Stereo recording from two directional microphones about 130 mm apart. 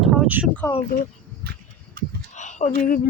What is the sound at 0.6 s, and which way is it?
Speech, 20° left (ahead or behind).